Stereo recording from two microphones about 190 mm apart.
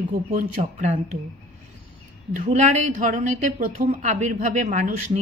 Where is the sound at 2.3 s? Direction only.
40° right (ahead or behind).